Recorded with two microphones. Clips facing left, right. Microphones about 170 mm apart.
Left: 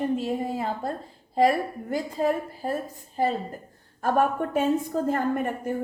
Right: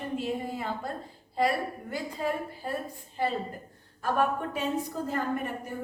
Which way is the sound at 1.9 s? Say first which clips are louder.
Left 7 dB; 45° left (ahead or behind).